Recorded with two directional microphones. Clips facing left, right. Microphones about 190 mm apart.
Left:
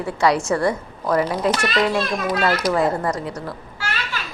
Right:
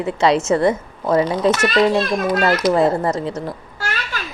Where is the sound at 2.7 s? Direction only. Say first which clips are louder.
Right 4 dB; 25° right (ahead or behind).